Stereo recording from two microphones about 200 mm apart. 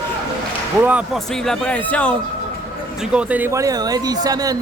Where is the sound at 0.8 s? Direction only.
5° right (ahead or behind).